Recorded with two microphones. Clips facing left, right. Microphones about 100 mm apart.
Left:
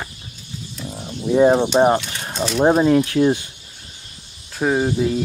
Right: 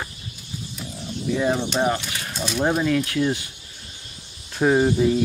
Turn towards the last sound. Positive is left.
turn(degrees=0)  # may be behind; listen again after turning